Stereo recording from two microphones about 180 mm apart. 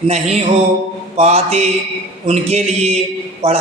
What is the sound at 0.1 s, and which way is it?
A man's voice, 35° right (ahead or behind).